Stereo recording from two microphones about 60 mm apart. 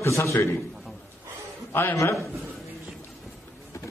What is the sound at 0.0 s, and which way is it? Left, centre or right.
Speech, left.